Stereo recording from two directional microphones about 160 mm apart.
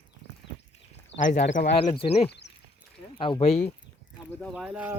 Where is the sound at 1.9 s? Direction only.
35° left (ahead or behind).